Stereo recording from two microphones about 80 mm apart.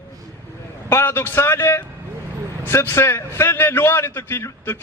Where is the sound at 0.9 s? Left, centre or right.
Left.